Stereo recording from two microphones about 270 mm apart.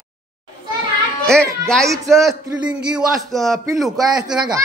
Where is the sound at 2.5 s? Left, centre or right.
Centre.